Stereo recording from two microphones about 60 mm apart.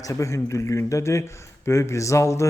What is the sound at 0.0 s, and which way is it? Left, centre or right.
A man's voice, left.